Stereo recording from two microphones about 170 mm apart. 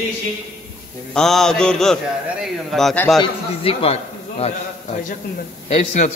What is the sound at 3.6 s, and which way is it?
Speech, 35° left (ahead or behind).